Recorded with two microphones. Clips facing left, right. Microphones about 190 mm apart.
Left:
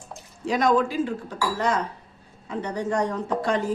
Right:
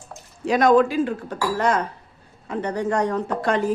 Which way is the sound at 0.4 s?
60° right (ahead or behind).